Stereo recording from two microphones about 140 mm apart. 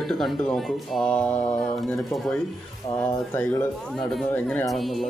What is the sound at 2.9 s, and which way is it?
Speech, 45° left (ahead or behind).